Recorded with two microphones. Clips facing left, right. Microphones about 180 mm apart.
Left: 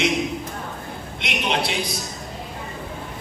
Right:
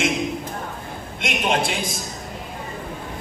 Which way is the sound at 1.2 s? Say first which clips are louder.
Right 2 dB; 45° right (ahead or behind).